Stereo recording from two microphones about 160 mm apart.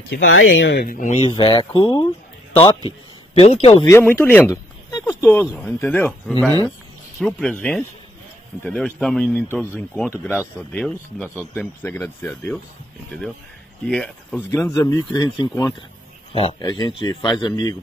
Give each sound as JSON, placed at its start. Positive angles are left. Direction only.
{"t": 0.1, "sound": "speech", "side_deg": 90}
{"t": 1.3, "sound": "a man's voice", "side_deg": 30}
{"t": 3.3, "sound": "speech", "side_deg": 40}
{"t": 3.9, "sound": "speech", "side_deg": 15}
{"t": 5.0, "sound": "a sound", "side_deg": 10}
{"t": 5.7, "sound": "speech", "side_deg": 10}
{"t": 13.8, "sound": "speech", "side_deg": 5}
{"t": 14.7, "sound": "a man's voice", "side_deg": 20}